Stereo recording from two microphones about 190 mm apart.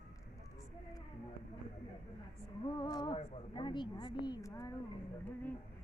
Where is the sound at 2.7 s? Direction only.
25° left (ahead or behind).